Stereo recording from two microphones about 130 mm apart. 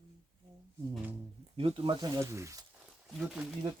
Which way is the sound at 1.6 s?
45° right (ahead or behind).